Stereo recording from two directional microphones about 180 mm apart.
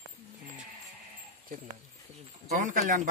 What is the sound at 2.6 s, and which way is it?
Speech, 45° right (ahead or behind).